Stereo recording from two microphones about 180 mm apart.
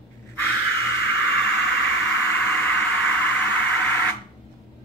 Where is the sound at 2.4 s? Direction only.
10° left (ahead or behind).